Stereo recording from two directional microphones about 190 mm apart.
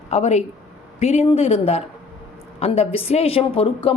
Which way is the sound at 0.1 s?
35° left (ahead or behind).